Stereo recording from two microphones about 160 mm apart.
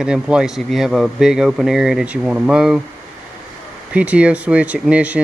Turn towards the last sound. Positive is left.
turn(degrees=-10)  # may be behind; listen again after turning